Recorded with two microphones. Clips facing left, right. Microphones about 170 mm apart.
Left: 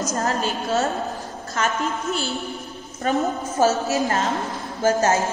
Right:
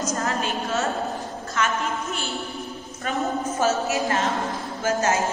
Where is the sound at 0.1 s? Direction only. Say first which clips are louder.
Left 2 dB; 40° left (ahead or behind).